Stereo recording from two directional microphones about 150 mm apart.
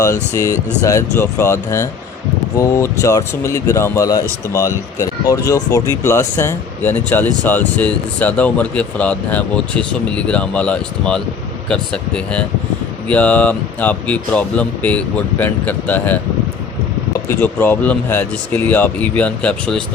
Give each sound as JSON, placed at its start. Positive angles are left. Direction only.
{"t": 0.0, "sound": "speech", "side_deg": 20}
{"t": 17.2, "sound": "speech", "side_deg": 15}